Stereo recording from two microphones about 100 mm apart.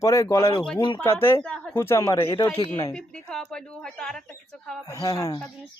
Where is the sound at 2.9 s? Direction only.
10° left (ahead or behind).